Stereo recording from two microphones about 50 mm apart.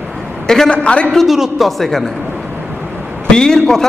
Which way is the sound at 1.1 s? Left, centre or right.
Centre.